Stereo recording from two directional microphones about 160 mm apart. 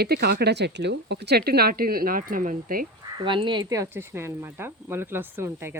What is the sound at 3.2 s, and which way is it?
Speech, 30° right (ahead or behind).